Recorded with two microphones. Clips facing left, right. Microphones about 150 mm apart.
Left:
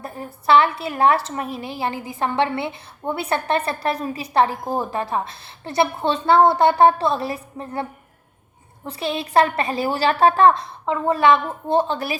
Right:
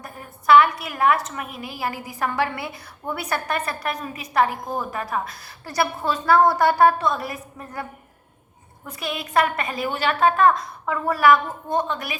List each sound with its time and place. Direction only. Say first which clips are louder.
0.0 s a woman's voice: left 3 dB; 30° left (ahead or behind)